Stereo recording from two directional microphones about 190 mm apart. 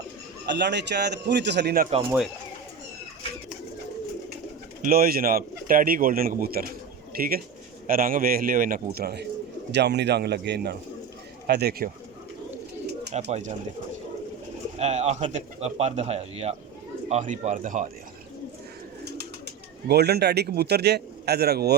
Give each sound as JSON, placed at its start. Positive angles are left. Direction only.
{"t": 0.4, "sound": "a man's voice", "side_deg": -65}
{"t": 4.8, "sound": "a man's voice", "side_deg": -50}
{"t": 13.3, "sound": "speech", "side_deg": -35}
{"t": 14.8, "sound": "speech", "side_deg": -35}
{"t": 19.9, "sound": "a man's voice", "side_deg": -60}